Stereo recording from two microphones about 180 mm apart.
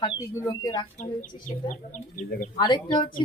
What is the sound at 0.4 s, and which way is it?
Speech, 20° left (ahead or behind).